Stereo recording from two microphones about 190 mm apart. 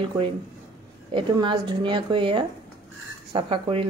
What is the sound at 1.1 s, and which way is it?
A woman's voice, 25° right (ahead or behind).